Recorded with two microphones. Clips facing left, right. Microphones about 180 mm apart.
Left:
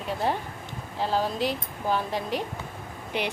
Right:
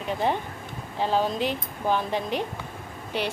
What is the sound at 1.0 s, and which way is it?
Speech, 5° left (ahead or behind).